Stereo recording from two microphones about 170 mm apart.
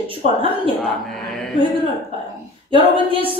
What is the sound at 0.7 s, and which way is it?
Speech, 5° left (ahead or behind).